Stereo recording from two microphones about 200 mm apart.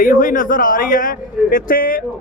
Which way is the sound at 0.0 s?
40° left (ahead or behind).